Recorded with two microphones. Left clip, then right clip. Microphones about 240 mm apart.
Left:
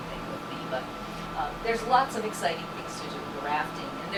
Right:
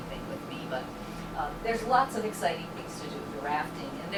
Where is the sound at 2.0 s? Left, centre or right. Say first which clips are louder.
Left 1 dB; centre.